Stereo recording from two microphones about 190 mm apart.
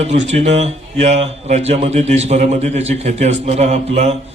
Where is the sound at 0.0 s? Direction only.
35° right (ahead or behind).